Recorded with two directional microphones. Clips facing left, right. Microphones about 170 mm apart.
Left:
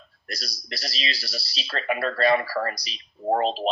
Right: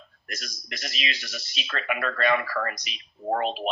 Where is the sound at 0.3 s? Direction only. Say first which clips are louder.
Left 3 dB; 35° left (ahead or behind).